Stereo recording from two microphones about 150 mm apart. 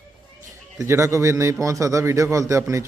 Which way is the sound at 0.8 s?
20° right (ahead or behind).